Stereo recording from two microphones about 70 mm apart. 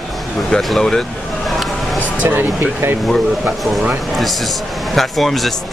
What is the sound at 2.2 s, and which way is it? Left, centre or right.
Speech, right.